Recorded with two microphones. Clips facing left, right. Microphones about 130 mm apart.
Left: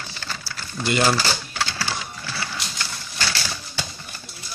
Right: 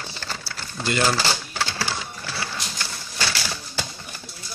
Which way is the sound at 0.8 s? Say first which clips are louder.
Left 2 dB; 15° left (ahead or behind).